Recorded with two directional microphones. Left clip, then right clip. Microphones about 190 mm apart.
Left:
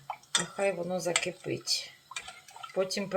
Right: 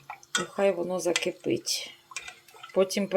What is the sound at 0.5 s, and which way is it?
Speech, 40° right (ahead or behind).